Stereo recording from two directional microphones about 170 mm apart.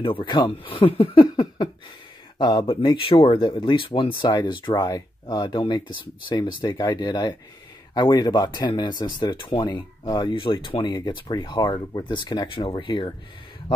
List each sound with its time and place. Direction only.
0.0 s speech: 30° left (ahead or behind)